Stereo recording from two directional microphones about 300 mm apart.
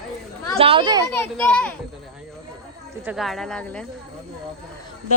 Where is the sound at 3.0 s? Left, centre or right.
Centre.